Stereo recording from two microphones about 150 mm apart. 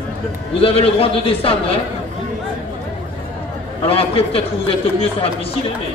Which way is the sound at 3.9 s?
40° left (ahead or behind).